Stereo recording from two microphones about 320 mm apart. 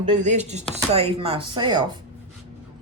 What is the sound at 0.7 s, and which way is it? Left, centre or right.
Chopping, centre.